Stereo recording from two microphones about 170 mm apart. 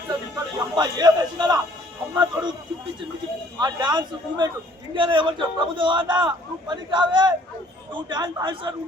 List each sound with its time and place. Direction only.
0.6 s a man's voice: 25° right (ahead or behind)
2.1 s a sound: 25° right (ahead or behind)
3.6 s a man's voice: 25° right (ahead or behind)